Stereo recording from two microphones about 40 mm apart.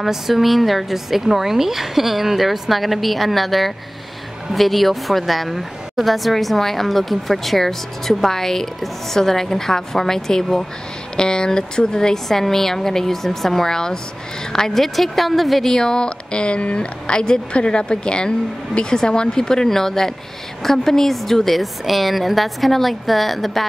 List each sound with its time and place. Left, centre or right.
0.0 s a woman's voice: centre
15.7 s a woman's voice: centre